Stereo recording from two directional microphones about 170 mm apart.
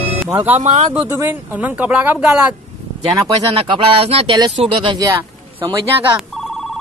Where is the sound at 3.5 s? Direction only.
30° right (ahead or behind).